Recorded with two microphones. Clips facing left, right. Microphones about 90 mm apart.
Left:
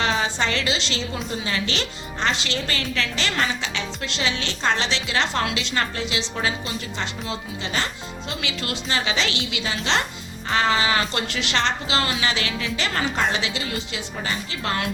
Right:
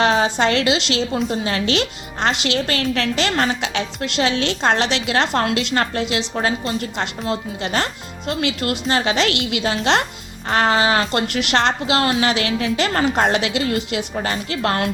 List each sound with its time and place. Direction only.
0.0 s a woman's voice: 60° right (ahead or behind)
6.3 s a woman's voice: 50° right (ahead or behind)
7.0 s a woman's voice: 60° right (ahead or behind)